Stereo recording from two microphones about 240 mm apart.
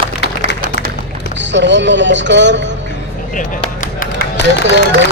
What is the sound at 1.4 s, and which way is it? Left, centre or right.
A man's voice, right.